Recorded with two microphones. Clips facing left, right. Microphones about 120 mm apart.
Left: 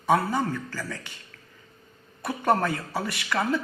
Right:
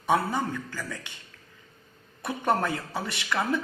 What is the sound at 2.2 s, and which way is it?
Speech, 20° right (ahead or behind).